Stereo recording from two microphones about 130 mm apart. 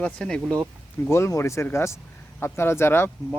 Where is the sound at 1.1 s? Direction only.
20° left (ahead or behind).